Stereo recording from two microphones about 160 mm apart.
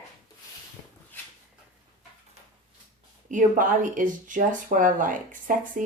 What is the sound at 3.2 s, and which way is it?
Speech, 55° right (ahead or behind).